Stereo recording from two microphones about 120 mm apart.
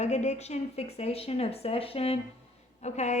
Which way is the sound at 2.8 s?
70° left (ahead or behind).